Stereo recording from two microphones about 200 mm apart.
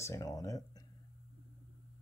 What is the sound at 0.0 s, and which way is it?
Speech, 15° left (ahead or behind).